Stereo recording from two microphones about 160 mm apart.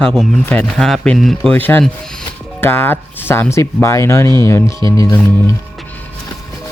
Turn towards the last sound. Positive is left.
turn(degrees=20)  # may be behind; listen again after turning